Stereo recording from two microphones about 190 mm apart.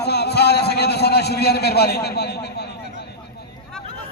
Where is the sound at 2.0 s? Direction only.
60° left (ahead or behind).